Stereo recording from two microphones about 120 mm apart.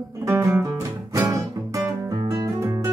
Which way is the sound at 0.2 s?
25° right (ahead or behind).